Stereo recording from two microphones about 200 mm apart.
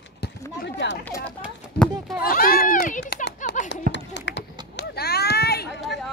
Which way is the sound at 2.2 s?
45° left (ahead or behind).